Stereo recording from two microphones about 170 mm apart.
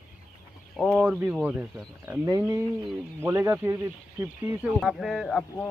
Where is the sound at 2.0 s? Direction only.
20° right (ahead or behind).